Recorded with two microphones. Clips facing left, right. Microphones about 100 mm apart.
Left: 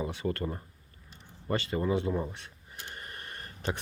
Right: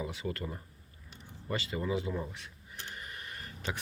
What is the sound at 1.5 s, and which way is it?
Speech, 35° left (ahead or behind).